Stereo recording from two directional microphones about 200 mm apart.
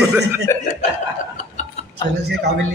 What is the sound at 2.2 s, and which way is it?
Speech, 55° right (ahead or behind).